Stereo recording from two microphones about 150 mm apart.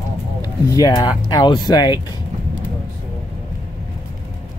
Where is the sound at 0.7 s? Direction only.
25° left (ahead or behind).